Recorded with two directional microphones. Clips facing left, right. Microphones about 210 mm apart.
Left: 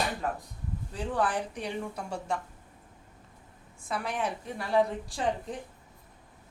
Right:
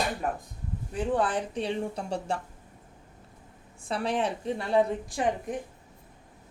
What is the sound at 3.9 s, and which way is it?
A woman's voice, 30° right (ahead or behind).